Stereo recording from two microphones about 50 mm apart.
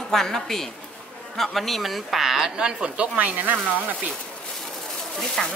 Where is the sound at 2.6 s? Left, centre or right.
Centre.